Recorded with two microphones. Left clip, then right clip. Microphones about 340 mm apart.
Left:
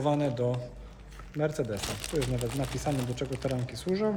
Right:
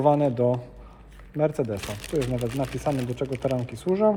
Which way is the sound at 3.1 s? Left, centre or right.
Centre.